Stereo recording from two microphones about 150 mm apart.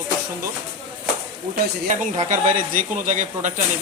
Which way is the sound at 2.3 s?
60° right (ahead or behind).